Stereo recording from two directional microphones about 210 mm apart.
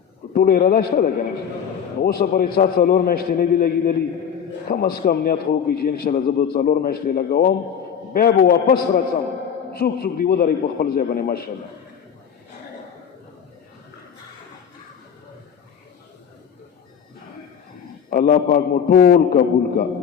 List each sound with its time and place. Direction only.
0.3 s a man's voice: 45° left (ahead or behind)
18.1 s a man's voice: 45° left (ahead or behind)